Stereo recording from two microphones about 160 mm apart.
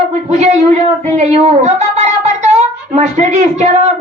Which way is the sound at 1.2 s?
40° right (ahead or behind).